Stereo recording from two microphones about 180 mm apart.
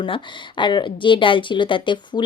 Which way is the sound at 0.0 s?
25° left (ahead or behind).